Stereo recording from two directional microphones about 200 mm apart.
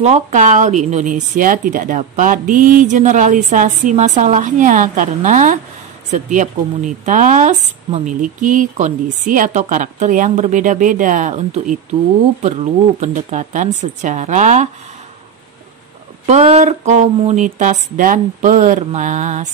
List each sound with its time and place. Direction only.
0.0 s speech: 35° right (ahead or behind)
16.3 s speech: 35° right (ahead or behind)